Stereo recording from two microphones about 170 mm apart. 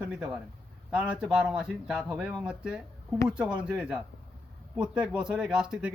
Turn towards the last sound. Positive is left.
turn(degrees=-5)  # may be behind; listen again after turning